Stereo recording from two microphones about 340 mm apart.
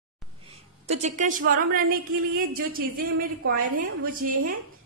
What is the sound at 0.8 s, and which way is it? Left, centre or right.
Speech, centre.